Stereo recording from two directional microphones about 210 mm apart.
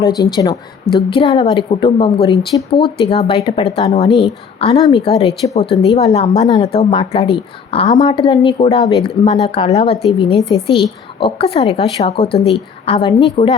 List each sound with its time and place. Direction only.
0.0 s a woman's voice: 20° left (ahead or behind)